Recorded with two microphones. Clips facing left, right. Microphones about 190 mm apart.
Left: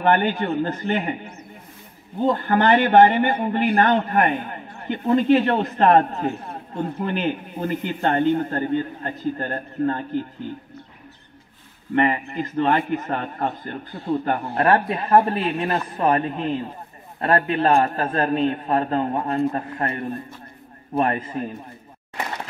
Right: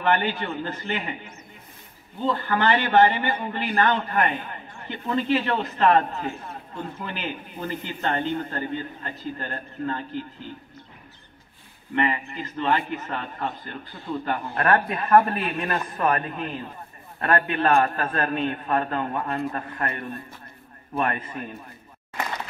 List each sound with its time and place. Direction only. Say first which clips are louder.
0.0 s a man's voice: left 4 dB; 50° left (ahead or behind)
2.1 s a man's voice: left 5 dB; 50° left (ahead or behind)
11.9 s a man's voice: left 5 dB; 45° left (ahead or behind)
14.6 s a man's voice: left 3 dB; 30° left (ahead or behind)